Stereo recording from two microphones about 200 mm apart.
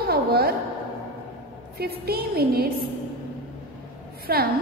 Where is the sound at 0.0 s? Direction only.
50° right (ahead or behind).